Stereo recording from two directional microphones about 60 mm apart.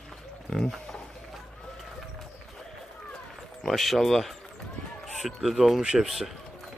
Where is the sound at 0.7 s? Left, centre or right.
Centre.